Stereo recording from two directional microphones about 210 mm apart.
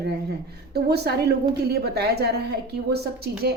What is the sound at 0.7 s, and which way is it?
A woman's voice, 50° right (ahead or behind).